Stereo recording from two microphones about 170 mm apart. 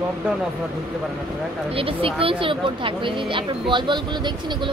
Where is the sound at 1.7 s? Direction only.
35° right (ahead or behind).